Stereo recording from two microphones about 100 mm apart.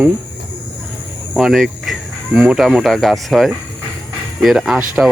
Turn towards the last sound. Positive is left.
turn(degrees=-5)  # may be behind; listen again after turning